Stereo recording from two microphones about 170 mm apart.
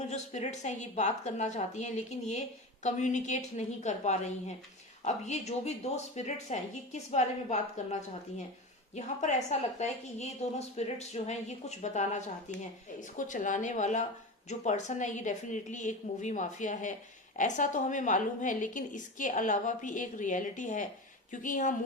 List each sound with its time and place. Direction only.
0.0 s a woman's voice: 40° left (ahead or behind)
9.0 s a woman's voice: 45° left (ahead or behind)